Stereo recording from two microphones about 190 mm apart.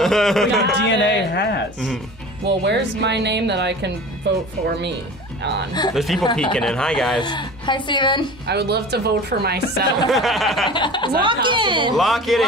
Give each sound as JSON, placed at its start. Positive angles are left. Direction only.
{"t": 0.0, "sound": "a sound", "side_deg": 0}
{"t": 0.7, "sound": "a sound", "side_deg": 70}
{"t": 2.4, "sound": "speech", "side_deg": -60}
{"t": 5.9, "sound": "speech", "side_deg": 0}
{"t": 7.2, "sound": "speech", "side_deg": 25}
{"t": 8.5, "sound": "speech", "side_deg": -60}
{"t": 10.0, "sound": "speech", "side_deg": 0}
{"t": 10.7, "sound": "speech", "side_deg": 25}
{"t": 11.1, "sound": "speech", "side_deg": -25}
{"t": 12.0, "sound": "speech", "side_deg": 0}